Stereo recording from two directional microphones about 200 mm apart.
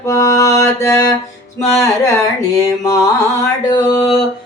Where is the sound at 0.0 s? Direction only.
15° left (ahead or behind).